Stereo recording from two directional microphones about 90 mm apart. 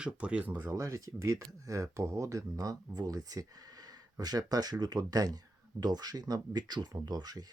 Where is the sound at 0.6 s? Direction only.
40° right (ahead or behind).